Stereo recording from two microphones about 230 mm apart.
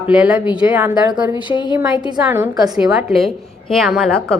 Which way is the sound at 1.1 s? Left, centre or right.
Centre.